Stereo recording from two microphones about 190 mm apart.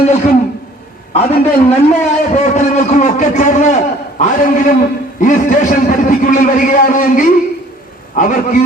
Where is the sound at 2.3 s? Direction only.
40° left (ahead or behind).